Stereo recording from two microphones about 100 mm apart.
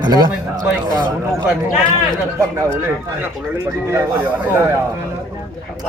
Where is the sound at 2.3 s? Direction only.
25° right (ahead or behind).